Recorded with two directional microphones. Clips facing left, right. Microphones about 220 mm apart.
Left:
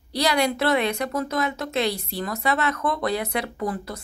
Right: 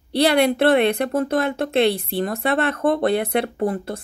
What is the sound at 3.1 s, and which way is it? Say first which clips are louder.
Speech: right 6 dB; 55° right (ahead or behind).